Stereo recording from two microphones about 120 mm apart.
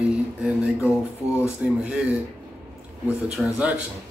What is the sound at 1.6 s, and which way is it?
Speech, 10° right (ahead or behind).